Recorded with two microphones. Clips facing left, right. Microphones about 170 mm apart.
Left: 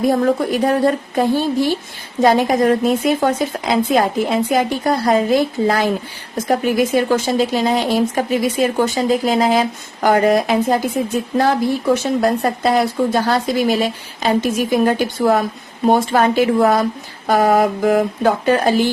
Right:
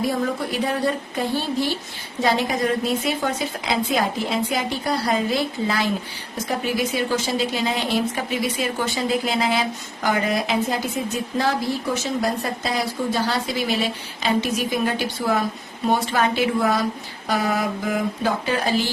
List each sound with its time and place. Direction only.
0.1 s speech: 50° left (ahead or behind)
12.0 s speech: 55° left (ahead or behind)